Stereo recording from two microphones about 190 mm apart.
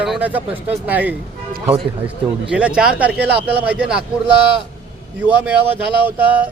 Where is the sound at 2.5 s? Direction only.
5° right (ahead or behind).